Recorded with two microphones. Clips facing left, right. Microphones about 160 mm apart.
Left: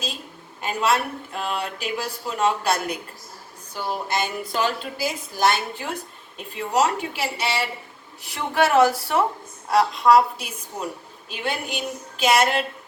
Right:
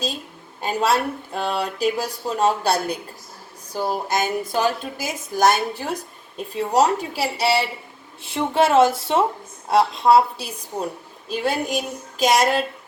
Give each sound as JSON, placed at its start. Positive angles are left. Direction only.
{"t": 0.6, "sound": "a woman's voice", "side_deg": -35}
{"t": 8.2, "sound": "a woman's voice", "side_deg": -25}